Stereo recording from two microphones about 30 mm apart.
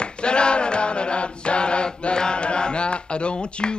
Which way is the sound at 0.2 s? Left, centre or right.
Left.